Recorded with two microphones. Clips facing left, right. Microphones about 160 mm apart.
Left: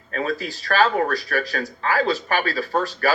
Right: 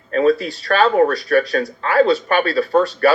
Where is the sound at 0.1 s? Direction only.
35° right (ahead or behind).